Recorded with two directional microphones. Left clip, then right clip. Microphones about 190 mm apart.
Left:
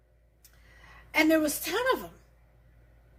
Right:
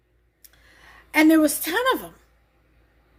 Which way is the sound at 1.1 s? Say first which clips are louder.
Right 7 dB; 40° right (ahead or behind).